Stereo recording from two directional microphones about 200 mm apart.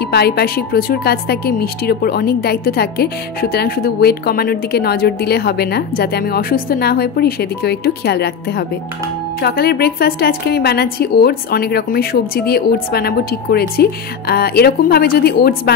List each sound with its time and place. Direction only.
0.0 s a woman's voice: 55° left (ahead or behind)